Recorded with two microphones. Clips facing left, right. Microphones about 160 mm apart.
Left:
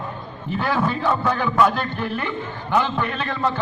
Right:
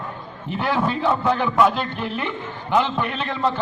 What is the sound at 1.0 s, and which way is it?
A man's voice, 20° right (ahead or behind).